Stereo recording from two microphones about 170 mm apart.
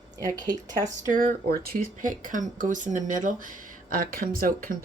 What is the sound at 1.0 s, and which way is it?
Speech, 55° right (ahead or behind).